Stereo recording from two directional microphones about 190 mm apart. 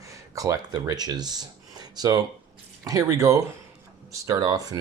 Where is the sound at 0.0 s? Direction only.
15° right (ahead or behind).